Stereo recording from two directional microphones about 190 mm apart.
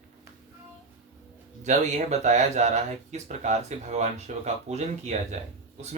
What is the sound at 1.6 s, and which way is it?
Speech, 40° right (ahead or behind).